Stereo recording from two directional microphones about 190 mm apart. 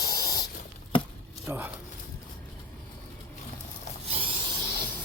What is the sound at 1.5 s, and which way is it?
Speech, 10° right (ahead or behind).